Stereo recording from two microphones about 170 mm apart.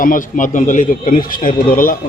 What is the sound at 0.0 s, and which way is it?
A man's voice, 50° left (ahead or behind).